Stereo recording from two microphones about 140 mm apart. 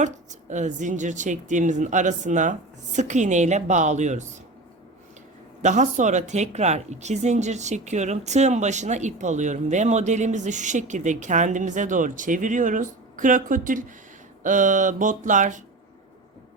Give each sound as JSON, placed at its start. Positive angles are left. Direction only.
{"t": 0.0, "sound": "speech", "side_deg": -60}
{"t": 5.6, "sound": "speech", "side_deg": -60}